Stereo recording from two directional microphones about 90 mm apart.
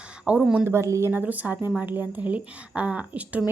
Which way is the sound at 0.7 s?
30° right (ahead or behind).